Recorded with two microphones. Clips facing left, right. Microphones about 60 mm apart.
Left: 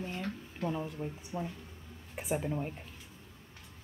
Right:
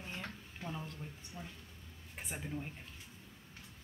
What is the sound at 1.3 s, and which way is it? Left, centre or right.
Speech, left.